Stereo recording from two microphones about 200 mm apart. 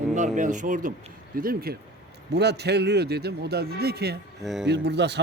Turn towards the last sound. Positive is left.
turn(degrees=-60)  # may be behind; listen again after turning